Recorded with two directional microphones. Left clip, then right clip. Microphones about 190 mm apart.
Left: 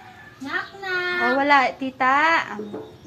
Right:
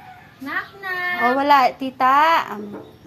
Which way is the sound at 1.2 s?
50° right (ahead or behind).